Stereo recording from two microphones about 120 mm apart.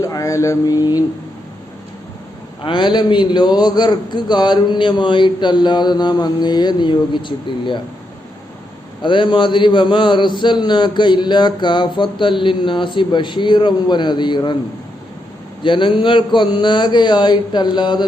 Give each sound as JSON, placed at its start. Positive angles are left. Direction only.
{"t": 0.0, "sound": "a sound", "side_deg": 30}
{"t": 2.6, "sound": "a man's voice", "side_deg": 40}
{"t": 9.0, "sound": "a man's voice", "side_deg": 45}
{"t": 15.6, "sound": "a man's voice", "side_deg": 45}